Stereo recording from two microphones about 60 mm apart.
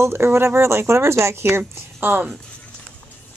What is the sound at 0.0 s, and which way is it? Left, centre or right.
Speech, right.